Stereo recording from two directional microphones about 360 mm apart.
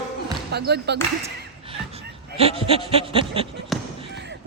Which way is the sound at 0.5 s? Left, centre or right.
Right.